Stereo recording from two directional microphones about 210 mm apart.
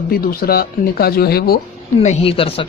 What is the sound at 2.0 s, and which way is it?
Speech, 30° left (ahead or behind).